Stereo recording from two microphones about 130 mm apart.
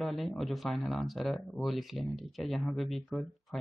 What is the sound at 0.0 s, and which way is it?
Speech, centre (ahead or behind).